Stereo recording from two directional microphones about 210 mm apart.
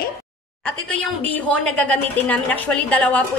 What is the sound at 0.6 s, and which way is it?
A woman's voice, 5° left (ahead or behind).